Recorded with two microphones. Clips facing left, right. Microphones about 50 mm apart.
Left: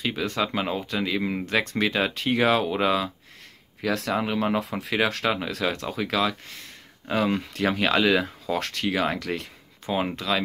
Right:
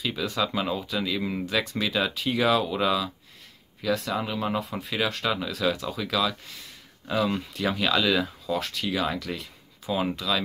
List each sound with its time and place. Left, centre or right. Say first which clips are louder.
0.0 s speech: left 1 dB; left
1.4 s speech: left 3 dB; left
4.1 s speech: left 4 dB; left
4.6 s speech: left 3 dB; left
5.3 s speech: even; left
8.5 s speech: left 3 dB; left